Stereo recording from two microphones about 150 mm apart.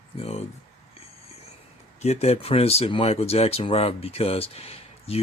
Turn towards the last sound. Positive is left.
turn(degrees=40)  # may be behind; listen again after turning